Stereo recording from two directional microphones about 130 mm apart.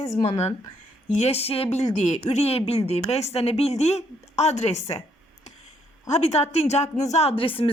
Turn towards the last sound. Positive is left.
turn(degrees=45)  # may be behind; listen again after turning